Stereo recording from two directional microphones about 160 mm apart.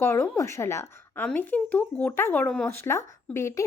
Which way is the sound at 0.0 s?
15° left (ahead or behind).